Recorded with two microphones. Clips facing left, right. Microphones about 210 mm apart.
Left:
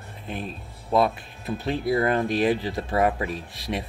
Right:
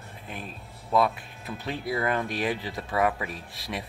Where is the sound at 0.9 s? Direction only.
25° left (ahead or behind).